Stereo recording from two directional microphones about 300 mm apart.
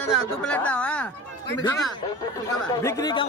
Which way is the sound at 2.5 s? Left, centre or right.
Centre.